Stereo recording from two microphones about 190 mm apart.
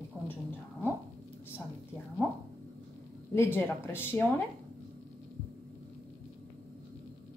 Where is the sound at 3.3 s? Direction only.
10° left (ahead or behind).